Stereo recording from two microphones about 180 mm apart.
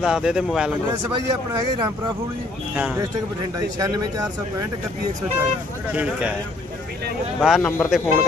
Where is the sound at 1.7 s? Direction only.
25° right (ahead or behind).